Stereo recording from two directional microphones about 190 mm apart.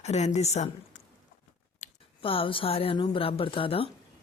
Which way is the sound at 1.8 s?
30° left (ahead or behind).